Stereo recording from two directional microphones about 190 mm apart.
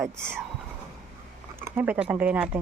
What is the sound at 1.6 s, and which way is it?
Speech, 5° right (ahead or behind).